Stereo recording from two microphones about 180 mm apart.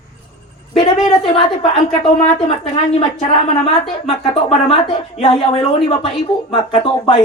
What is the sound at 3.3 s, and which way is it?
A woman's voice, 35° left (ahead or behind).